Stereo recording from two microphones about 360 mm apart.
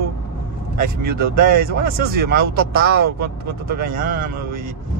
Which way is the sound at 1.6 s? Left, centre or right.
Right.